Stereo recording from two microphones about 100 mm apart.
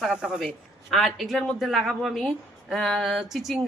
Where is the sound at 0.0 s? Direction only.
5° right (ahead or behind).